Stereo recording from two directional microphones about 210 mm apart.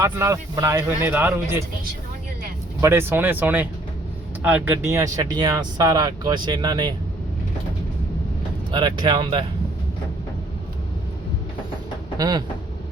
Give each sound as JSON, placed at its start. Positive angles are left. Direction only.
{"t": 0.0, "sound": "speech", "side_deg": -15}
{"t": 2.8, "sound": "speech", "side_deg": -10}
{"t": 8.7, "sound": "speech", "side_deg": -20}
{"t": 12.1, "sound": "speech", "side_deg": -15}